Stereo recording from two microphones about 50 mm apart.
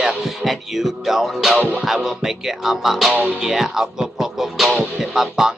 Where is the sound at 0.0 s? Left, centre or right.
Centre.